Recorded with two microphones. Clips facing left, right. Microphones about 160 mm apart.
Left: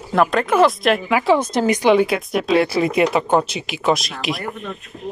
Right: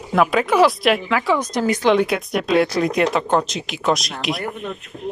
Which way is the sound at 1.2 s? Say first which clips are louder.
Left 3 dB; 25° left (ahead or behind).